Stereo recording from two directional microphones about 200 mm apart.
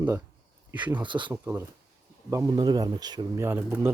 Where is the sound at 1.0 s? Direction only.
25° right (ahead or behind).